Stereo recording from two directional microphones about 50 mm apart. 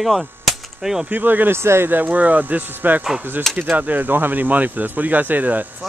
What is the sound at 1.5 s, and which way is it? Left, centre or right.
Speech, right.